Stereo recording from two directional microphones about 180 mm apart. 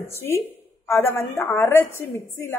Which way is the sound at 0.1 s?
15° left (ahead or behind).